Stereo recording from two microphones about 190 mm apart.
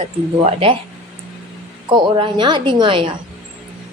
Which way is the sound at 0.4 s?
30° right (ahead or behind).